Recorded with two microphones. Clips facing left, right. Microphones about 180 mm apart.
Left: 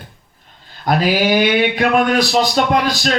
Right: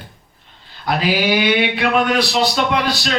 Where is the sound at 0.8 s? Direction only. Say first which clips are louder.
Left 3 dB; 45° left (ahead or behind).